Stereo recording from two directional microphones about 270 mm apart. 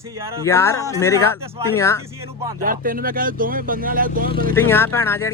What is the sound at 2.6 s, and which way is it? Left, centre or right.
Speech, right.